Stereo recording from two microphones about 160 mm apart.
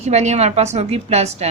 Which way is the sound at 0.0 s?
45° right (ahead or behind).